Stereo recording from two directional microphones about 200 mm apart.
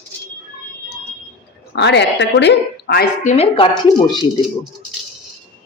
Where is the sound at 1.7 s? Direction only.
60° left (ahead or behind).